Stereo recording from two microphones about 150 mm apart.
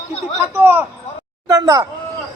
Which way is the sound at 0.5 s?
15° right (ahead or behind).